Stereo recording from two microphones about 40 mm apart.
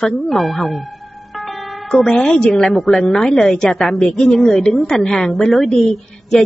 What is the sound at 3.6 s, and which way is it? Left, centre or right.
Speech, centre.